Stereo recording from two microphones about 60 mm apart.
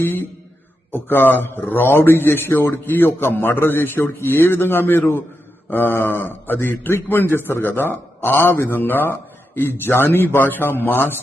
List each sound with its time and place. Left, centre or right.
0.0 s a man's voice: left